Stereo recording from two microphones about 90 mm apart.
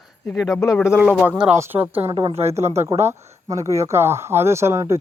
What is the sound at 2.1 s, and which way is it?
Speech, 50° right (ahead or behind).